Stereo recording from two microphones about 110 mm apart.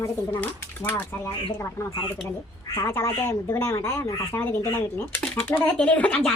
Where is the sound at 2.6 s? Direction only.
30° left (ahead or behind).